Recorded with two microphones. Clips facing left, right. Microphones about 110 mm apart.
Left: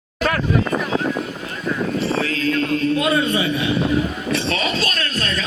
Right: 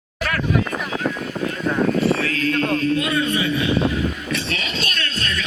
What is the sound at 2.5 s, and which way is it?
Speech, 45° right (ahead or behind).